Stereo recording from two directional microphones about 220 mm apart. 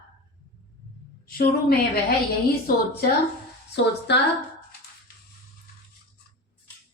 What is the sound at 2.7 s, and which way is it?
Speech, 40° left (ahead or behind).